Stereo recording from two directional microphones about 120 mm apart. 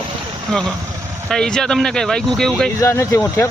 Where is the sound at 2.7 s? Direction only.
25° left (ahead or behind).